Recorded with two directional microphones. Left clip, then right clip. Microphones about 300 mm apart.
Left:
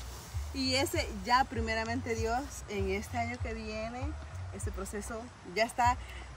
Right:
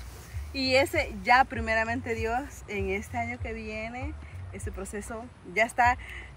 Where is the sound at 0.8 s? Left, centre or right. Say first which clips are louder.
Right 8 dB; centre.